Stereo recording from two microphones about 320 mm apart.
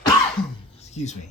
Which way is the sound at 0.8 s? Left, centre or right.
Centre.